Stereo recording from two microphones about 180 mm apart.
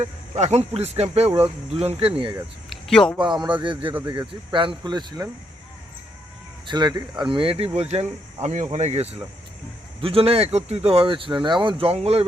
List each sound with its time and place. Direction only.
0.0 s speech: 35° right (ahead or behind)
2.6 s a sound: centre (ahead or behind)
3.6 s speech: 25° right (ahead or behind)
3.9 s speech: 15° right (ahead or behind)
6.7 s speech: 25° right (ahead or behind)